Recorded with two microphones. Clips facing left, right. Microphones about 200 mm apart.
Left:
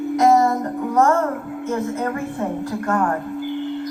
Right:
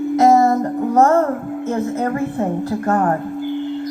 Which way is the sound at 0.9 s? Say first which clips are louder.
Right 3 dB; 35° right (ahead or behind).